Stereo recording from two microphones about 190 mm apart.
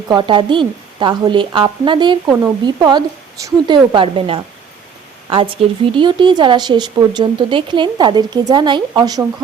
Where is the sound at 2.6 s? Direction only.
25° right (ahead or behind).